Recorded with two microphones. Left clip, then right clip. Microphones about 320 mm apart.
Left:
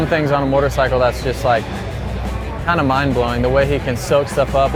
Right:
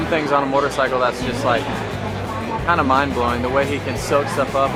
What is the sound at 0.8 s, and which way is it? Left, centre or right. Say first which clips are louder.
Speech: left 3 dB; left.